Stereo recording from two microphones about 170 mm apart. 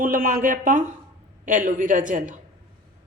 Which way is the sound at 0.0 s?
55° right (ahead or behind).